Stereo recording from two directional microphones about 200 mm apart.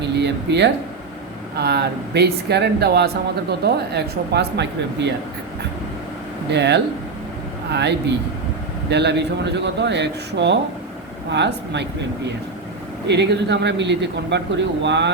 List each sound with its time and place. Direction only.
0.0 s a sound: 60° right (ahead or behind)
1.5 s speech: 55° right (ahead or behind)
6.5 s speech: 60° right (ahead or behind)